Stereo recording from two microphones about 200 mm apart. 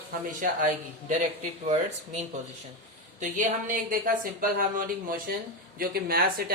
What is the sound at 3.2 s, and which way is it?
Speech, 40° right (ahead or behind).